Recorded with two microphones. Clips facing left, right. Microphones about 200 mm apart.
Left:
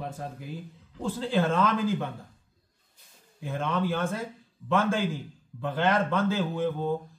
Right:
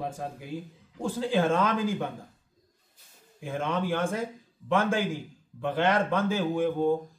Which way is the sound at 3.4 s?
15° right (ahead or behind).